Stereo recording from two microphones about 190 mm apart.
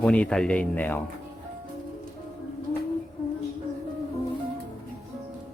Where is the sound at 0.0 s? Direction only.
5° left (ahead or behind).